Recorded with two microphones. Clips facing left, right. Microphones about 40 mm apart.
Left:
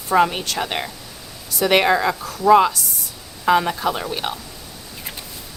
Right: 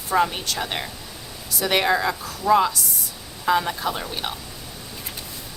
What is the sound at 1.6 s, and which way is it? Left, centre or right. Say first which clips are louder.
A woman's voice: left 4 dB; left.